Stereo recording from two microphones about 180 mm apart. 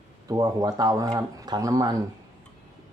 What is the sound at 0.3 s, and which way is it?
Speech, 20° right (ahead or behind).